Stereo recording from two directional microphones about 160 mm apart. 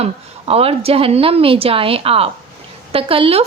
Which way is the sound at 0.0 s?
40° right (ahead or behind).